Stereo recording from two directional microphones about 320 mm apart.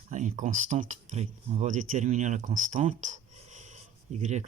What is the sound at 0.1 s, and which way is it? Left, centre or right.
Speech, right.